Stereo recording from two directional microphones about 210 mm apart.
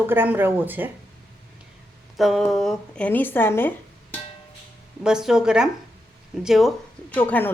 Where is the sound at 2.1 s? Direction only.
Centre (ahead or behind).